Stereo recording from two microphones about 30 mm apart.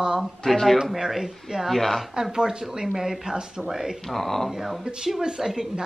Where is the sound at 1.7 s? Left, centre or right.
Centre.